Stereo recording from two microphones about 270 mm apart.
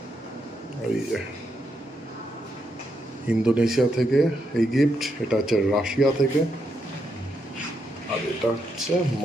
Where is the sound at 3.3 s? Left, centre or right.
Centre.